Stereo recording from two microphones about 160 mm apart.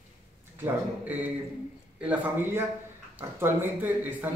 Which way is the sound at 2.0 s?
10° right (ahead or behind).